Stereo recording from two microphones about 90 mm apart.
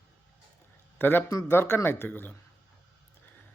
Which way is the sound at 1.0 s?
20° left (ahead or behind).